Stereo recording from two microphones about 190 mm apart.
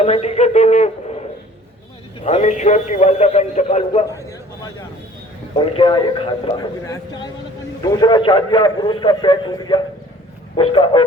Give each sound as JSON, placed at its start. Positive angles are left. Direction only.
{"t": 0.0, "sound": "a man's voice", "side_deg": 35}
{"t": 2.2, "sound": "a man's voice", "side_deg": 35}
{"t": 5.5, "sound": "a man's voice", "side_deg": 25}